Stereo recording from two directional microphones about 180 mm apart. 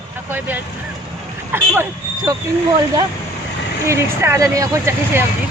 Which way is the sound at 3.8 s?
15° right (ahead or behind).